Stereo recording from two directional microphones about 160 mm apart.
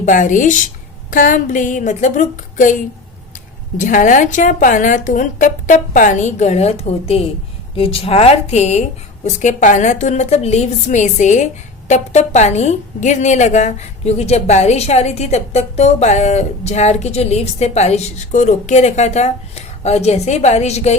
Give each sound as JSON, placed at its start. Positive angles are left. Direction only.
{"t": 0.0, "sound": "a woman's voice", "side_deg": 50}